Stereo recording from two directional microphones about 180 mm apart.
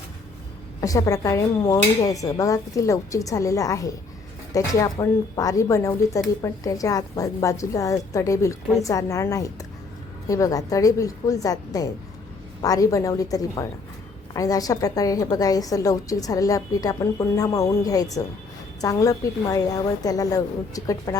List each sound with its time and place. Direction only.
0.8 s a woman's voice: 20° left (ahead or behind)